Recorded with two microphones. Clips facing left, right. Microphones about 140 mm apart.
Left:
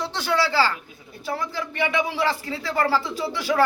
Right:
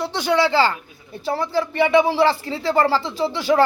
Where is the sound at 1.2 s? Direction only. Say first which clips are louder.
Right 7 dB; 30° right (ahead or behind).